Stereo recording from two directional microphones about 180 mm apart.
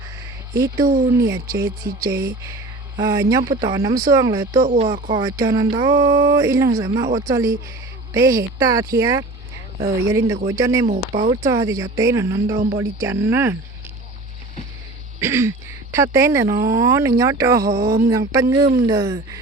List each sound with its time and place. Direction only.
0.5 s speech: 15° right (ahead or behind)
0.9 s speech: 50° right (ahead or behind)
1.5 s speech: 15° right (ahead or behind)
10.8 s speech: 40° right (ahead or behind)
11.4 s speech: 15° right (ahead or behind)
15.2 s speech: 15° right (ahead or behind)
17.8 s speech: 55° right (ahead or behind)
18.1 s speech: 20° right (ahead or behind)